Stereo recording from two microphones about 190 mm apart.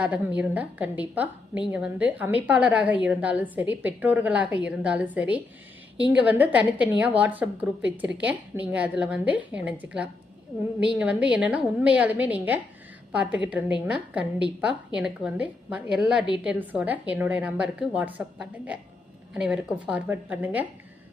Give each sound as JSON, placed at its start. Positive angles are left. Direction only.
{"t": 0.0, "sound": "a woman's voice", "side_deg": -5}